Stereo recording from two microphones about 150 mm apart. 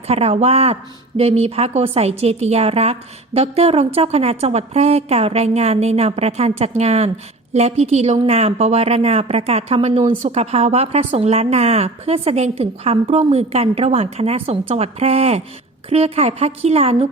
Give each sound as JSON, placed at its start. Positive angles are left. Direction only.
{"t": 0.1, "sound": "a woman's voice", "side_deg": -45}